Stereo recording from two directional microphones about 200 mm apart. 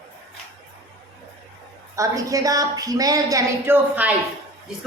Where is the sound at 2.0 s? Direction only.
15° right (ahead or behind).